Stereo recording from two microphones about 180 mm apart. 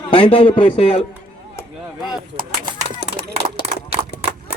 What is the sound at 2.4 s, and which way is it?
Speech, 50° right (ahead or behind).